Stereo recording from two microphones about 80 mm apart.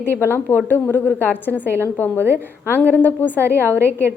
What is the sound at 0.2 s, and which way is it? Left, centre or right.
Speech, left.